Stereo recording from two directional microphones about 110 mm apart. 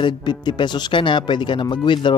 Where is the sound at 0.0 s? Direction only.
45° left (ahead or behind).